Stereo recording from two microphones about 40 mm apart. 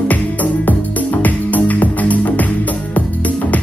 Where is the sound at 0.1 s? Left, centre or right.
Left.